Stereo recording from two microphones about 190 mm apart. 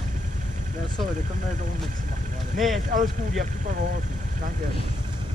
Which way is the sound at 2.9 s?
50° right (ahead or behind).